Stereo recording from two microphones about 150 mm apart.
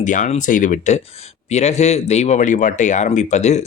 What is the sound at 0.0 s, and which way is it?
Speech, 55° left (ahead or behind).